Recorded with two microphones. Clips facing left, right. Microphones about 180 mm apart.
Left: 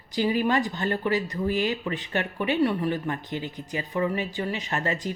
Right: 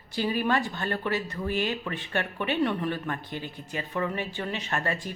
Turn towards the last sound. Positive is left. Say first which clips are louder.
# left 2 dB
turn(degrees=15)  # may be behind; listen again after turning